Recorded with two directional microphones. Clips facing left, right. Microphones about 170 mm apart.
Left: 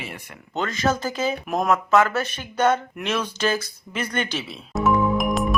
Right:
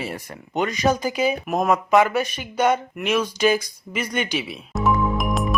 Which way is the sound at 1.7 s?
15° right (ahead or behind).